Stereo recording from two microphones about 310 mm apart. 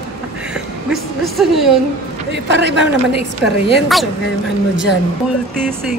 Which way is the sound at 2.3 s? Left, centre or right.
Right.